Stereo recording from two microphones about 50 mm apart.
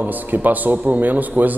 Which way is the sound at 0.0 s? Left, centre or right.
Right.